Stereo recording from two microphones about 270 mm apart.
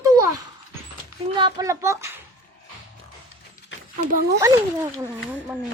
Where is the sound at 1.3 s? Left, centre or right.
Centre.